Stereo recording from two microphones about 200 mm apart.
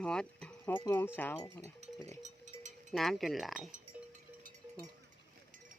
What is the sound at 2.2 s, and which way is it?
Music, 35° right (ahead or behind).